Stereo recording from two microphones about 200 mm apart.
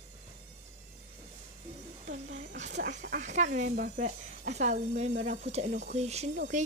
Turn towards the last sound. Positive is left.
turn(degrees=-35)  # may be behind; listen again after turning